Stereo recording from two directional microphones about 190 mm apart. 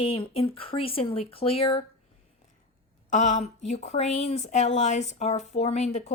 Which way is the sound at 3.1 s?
40° left (ahead or behind).